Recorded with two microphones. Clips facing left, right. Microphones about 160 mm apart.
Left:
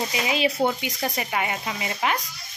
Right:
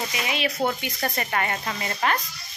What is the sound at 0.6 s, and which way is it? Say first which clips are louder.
Speech: left 1 dB; 15° left (ahead or behind).